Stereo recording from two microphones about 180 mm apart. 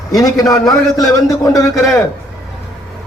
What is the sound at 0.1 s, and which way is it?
A man's voice, 20° left (ahead or behind).